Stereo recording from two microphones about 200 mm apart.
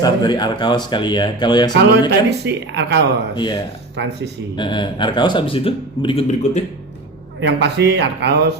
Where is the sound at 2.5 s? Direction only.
60° right (ahead or behind).